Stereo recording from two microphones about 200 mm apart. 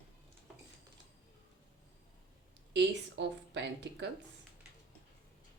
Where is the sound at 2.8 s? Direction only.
60° right (ahead or behind).